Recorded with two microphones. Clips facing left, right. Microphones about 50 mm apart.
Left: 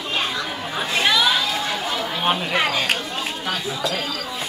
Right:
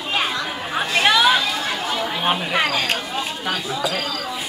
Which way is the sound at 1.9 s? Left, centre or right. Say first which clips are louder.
Right 1 dB; centre.